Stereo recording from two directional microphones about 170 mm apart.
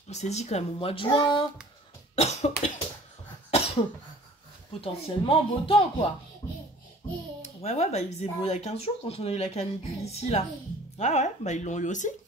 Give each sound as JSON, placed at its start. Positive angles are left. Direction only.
{"t": 0.1, "sound": "speech", "side_deg": 40}
{"t": 3.4, "sound": "cough", "side_deg": 35}
{"t": 4.8, "sound": "speech", "side_deg": 35}
{"t": 7.4, "sound": "speech", "side_deg": 40}